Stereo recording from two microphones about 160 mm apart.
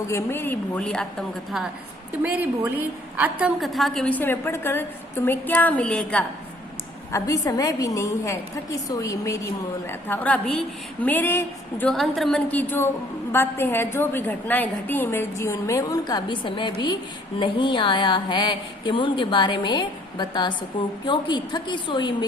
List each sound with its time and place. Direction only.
0.1 s a woman's voice: 15° left (ahead or behind)
2.2 s a woman's voice: 10° right (ahead or behind); by 6.2 s 5° left (ahead or behind)
7.1 s a woman's voice: 20° left (ahead or behind)
10.1 s a woman's voice: 10° left (ahead or behind)
11.9 s a woman's voice: centre (ahead or behind); by 22.3 s 30° left (ahead or behind)